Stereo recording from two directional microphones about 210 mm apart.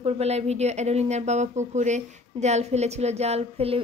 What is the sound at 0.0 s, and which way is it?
Speech, 30° right (ahead or behind).